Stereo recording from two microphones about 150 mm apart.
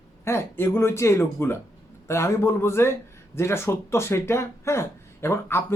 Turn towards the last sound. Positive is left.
turn(degrees=15)  # may be behind; listen again after turning